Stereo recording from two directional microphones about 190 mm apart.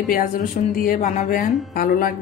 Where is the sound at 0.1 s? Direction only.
45° left (ahead or behind).